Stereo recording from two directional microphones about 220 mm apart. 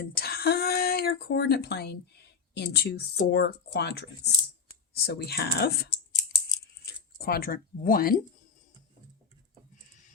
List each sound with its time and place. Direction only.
0.0 s speech: 45° left (ahead or behind)
5.0 s speech: 45° left (ahead or behind)